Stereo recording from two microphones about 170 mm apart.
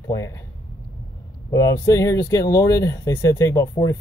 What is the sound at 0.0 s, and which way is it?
Speech, 20° left (ahead or behind).